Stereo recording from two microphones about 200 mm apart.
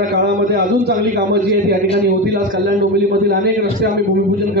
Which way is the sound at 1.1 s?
40° right (ahead or behind).